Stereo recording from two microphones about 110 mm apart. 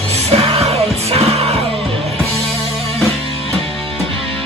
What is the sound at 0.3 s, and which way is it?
Music, 65° right (ahead or behind).